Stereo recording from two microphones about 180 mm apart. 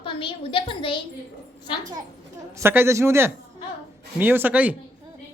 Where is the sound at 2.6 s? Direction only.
15° right (ahead or behind).